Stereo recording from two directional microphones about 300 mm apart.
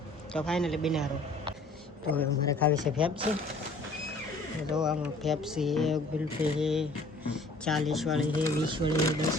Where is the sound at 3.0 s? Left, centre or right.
Centre.